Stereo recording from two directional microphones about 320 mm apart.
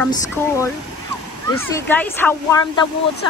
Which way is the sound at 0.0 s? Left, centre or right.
Centre.